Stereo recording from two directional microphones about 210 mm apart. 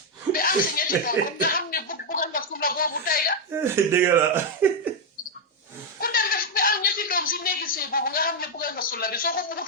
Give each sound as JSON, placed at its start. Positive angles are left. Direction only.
{"t": 0.3, "sound": "music", "side_deg": 45}
{"t": 1.2, "sound": "a sound", "side_deg": 45}
{"t": 3.5, "sound": "speech", "side_deg": -10}
{"t": 6.0, "sound": "chuckle", "side_deg": 45}